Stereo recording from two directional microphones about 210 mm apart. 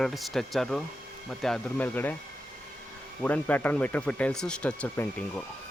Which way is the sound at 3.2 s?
10° left (ahead or behind).